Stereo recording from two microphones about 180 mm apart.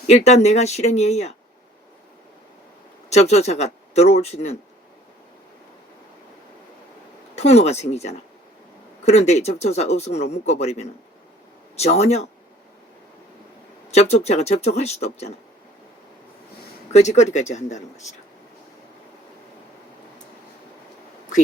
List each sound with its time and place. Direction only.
0.1 s speech: 40° left (ahead or behind)
3.1 s speech: 35° left (ahead or behind)
7.3 s speech: 35° left (ahead or behind)
13.9 s speech: 35° left (ahead or behind)
16.9 s speech: 40° left (ahead or behind)